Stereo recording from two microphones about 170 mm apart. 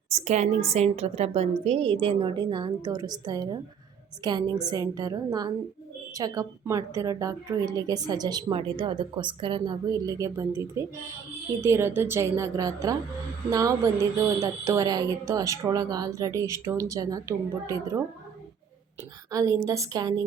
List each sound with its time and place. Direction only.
0.1 s a woman's voice: 40° right (ahead or behind); by 18.0 s 20° right (ahead or behind)
19.3 s a woman's voice: 20° right (ahead or behind)